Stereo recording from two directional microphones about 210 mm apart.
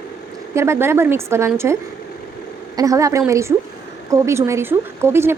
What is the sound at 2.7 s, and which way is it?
Speech, 15° right (ahead or behind).